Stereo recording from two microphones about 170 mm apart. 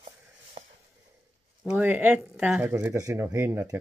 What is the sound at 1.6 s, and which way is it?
Speech, 10° right (ahead or behind).